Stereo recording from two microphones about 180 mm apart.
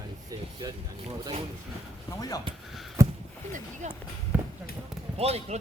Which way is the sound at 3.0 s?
15° right (ahead or behind).